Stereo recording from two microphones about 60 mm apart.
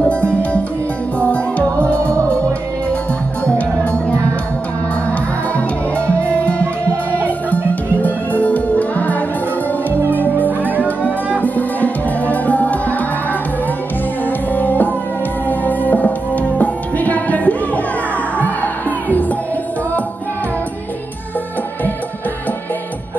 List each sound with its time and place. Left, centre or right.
0.0 s music: left
3.4 s music: centre
5.9 s music: left
10.6 s music: right
11.4 s music: left
14.5 s music: left